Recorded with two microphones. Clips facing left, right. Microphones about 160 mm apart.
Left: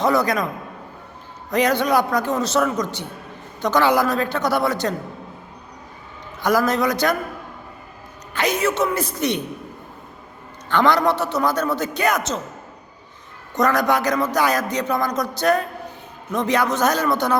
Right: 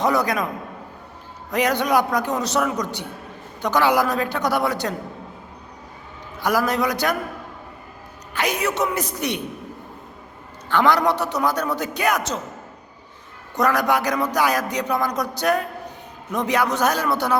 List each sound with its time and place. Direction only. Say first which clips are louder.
0.0 s a man's voice: left 2 dB; 15° right (ahead or behind)
1.5 s a man's voice: left 1 dB; 10° right (ahead or behind)
6.4 s a man's voice: left 2 dB; 10° right (ahead or behind)
8.3 s a man's voice: left 3 dB; 10° right (ahead or behind)
10.7 s a man's voice: left 1 dB; 10° right (ahead or behind)
13.6 s a man's voice: left 1 dB; 10° right (ahead or behind)